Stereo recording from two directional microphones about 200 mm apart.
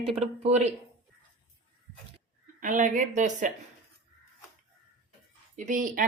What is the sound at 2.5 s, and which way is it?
Speech, 40° right (ahead or behind).